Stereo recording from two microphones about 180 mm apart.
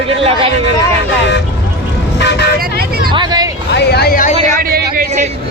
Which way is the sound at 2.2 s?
70° left (ahead or behind).